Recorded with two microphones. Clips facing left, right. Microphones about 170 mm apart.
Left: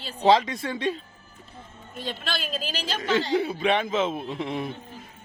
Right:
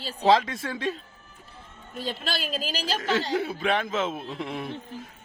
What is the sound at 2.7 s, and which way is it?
Speech, 35° right (ahead or behind).